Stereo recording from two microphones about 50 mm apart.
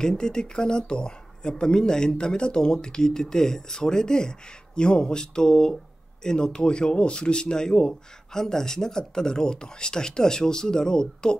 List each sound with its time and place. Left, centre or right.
0.0 s speech: centre